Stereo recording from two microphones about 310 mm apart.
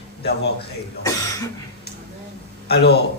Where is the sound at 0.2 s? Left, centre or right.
Left.